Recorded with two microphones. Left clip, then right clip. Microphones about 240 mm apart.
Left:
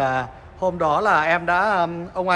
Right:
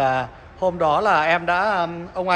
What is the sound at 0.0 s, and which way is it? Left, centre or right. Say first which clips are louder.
A man's voice: right 2 dB; centre.